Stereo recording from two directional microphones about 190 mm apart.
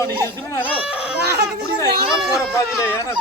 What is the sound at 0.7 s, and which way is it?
Baby cry, 5° right (ahead or behind).